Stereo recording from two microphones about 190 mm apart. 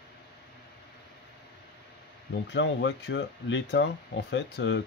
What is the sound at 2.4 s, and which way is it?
Speech, 65° left (ahead or behind).